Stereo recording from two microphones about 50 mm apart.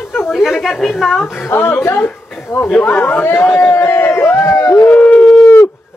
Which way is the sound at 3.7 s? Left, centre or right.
Left.